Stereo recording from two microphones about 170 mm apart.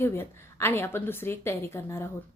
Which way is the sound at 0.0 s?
15° left (ahead or behind).